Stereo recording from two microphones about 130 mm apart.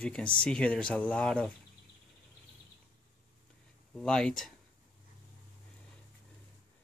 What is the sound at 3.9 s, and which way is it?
Speech, 5° left (ahead or behind).